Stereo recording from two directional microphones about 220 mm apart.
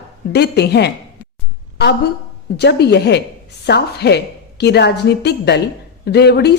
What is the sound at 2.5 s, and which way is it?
A woman's voice, 50° left (ahead or behind).